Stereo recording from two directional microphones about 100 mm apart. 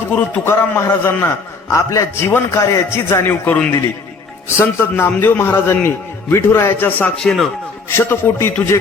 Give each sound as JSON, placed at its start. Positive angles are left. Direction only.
{"t": 0.4, "sound": "a man's voice", "side_deg": 20}
{"t": 7.2, "sound": "speech", "side_deg": 5}
{"t": 7.9, "sound": "a man's voice", "side_deg": 25}